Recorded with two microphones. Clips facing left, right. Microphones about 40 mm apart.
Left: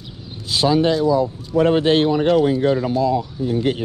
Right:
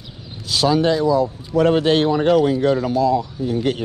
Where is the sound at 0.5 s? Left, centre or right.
Centre.